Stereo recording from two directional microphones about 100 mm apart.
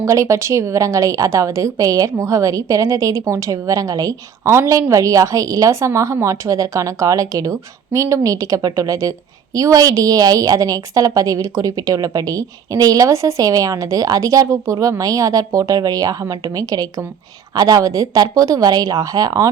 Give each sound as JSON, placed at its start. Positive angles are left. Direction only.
{"t": 0.0, "sound": "a woman's voice", "side_deg": -30}